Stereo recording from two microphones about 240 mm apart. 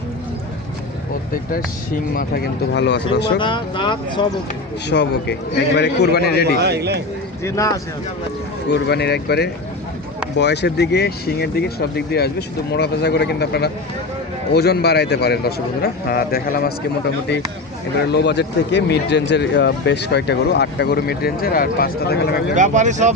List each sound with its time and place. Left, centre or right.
2.1 s speech: left
3.3 s speech: centre
4.9 s speech: left
6.6 s a man's voice: right
7.4 s speech: centre
8.7 s speech: left
18.1 s speech: left
22.5 s speech: right